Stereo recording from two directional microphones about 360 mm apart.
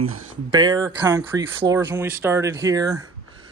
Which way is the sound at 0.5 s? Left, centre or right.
Centre.